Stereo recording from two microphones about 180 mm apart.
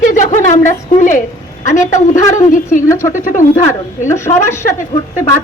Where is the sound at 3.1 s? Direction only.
45° left (ahead or behind).